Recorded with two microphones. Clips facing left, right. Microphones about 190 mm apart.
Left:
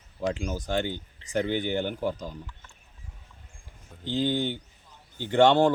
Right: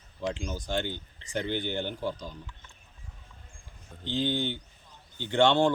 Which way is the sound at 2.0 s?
40° left (ahead or behind).